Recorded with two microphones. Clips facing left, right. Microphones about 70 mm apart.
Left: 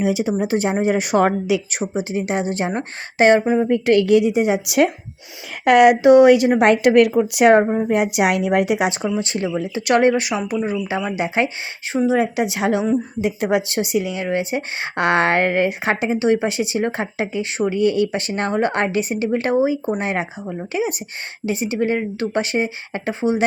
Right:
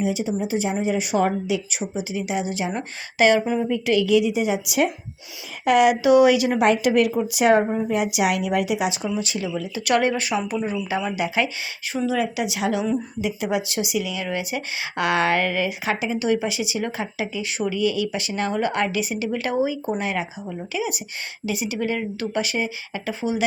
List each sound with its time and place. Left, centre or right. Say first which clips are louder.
0.0 s a woman's voice: left 4 dB; left
1.8 s a woman's voice: left 5 dB; left
2.7 s speech: left 3 dB; left
3.6 s a woman's voice: left 5 dB; left
6.0 s speech: left 5 dB; left
6.6 s a woman's voice: left 5 dB; left
7.7 s a woman's voice: left 4 dB; left
9.0 s speech: left 4 dB; left
12.8 s speech: left 4 dB; left
13.2 s speech: left 5 dB; left
16.4 s speech: left 5 dB; left